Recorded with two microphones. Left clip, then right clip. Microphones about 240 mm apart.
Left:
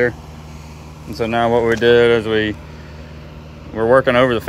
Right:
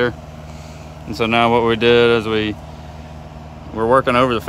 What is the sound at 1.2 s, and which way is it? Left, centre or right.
Speech, centre.